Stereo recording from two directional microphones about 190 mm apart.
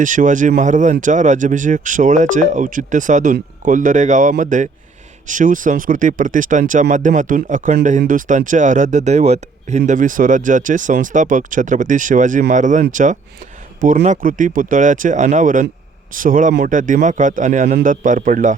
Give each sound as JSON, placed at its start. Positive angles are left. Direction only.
{"t": 0.0, "sound": "speech", "side_deg": -40}